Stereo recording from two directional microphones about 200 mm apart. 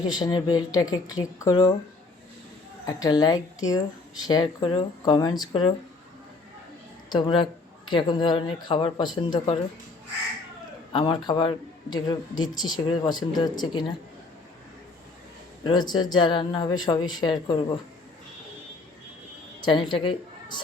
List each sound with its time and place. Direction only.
0.0 s speech: 20° left (ahead or behind)
2.8 s speech: 20° left (ahead or behind)
7.1 s speech: 25° left (ahead or behind)
10.9 s speech: 25° left (ahead or behind)
15.6 s speech: 20° left (ahead or behind)
19.6 s a woman's voice: 25° left (ahead or behind)